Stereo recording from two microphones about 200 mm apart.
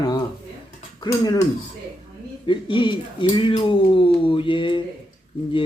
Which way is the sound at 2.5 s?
25° left (ahead or behind).